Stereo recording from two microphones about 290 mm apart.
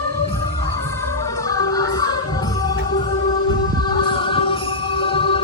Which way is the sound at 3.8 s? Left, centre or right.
Centre.